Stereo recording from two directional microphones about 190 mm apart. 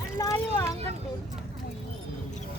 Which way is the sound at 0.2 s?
20° left (ahead or behind).